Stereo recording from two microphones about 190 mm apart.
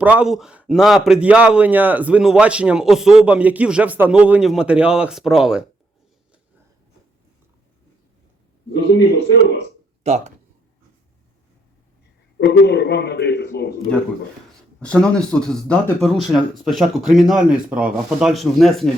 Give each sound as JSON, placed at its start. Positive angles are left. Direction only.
{"t": 0.0, "sound": "a man's voice", "side_deg": -5}
{"t": 9.3, "sound": "speech", "side_deg": 65}
{"t": 10.0, "sound": "speech", "side_deg": -35}
{"t": 12.4, "sound": "a man's voice", "side_deg": 60}
{"t": 14.8, "sound": "a man's voice", "side_deg": 5}